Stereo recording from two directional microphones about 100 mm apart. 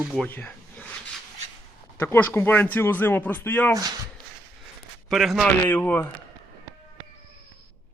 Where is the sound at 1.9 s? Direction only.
20° left (ahead or behind).